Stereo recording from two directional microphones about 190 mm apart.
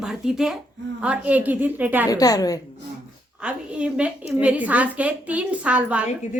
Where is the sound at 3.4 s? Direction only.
5° right (ahead or behind).